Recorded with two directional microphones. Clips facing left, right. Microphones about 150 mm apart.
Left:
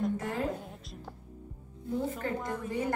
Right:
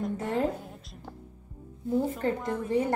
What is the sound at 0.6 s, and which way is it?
Speech, centre (ahead or behind).